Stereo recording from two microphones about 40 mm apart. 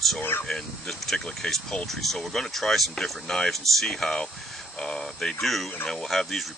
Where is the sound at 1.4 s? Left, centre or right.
Left.